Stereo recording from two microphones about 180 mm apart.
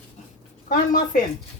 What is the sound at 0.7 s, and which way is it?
Speech, 50° left (ahead or behind).